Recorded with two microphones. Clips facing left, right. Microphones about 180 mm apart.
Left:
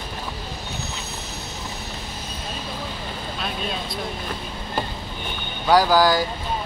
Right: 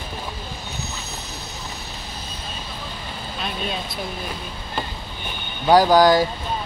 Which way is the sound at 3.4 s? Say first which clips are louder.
Right 2 dB; centre (ahead or behind).